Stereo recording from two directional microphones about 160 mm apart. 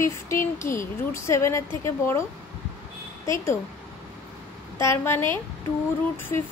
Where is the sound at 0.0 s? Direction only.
15° left (ahead or behind).